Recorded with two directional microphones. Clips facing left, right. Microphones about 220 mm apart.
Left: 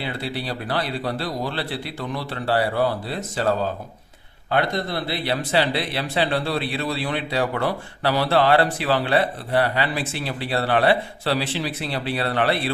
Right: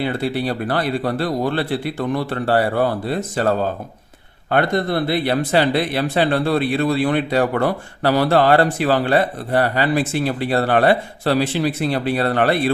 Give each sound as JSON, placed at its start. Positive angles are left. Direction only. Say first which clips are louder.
{"t": 0.0, "sound": "speech", "louder": "right 8 dB", "side_deg": -50}